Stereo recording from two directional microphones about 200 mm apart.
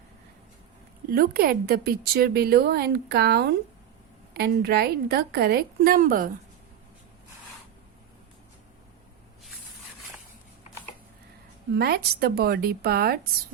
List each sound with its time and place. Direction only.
1.1 s a woman's voice: 50° right (ahead or behind)
11.8 s a woman's voice: 50° right (ahead or behind)